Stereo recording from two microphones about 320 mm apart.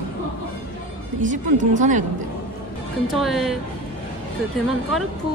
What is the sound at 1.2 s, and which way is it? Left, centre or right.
Speech, right.